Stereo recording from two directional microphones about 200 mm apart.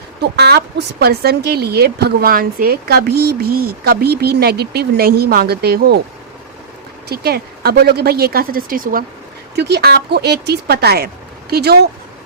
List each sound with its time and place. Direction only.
0.2 s speech: 55° right (ahead or behind)
7.1 s speech: 50° right (ahead or behind)